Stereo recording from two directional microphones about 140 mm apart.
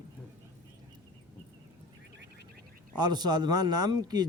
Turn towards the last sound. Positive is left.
turn(degrees=-30)  # may be behind; listen again after turning